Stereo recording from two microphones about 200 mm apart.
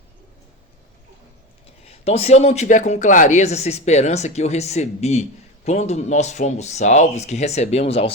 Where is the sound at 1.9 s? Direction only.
30° left (ahead or behind).